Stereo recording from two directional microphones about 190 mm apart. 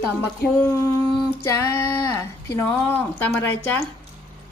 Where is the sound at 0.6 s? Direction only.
15° left (ahead or behind).